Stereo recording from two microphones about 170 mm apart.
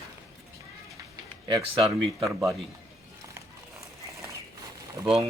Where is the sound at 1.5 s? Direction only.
25° right (ahead or behind).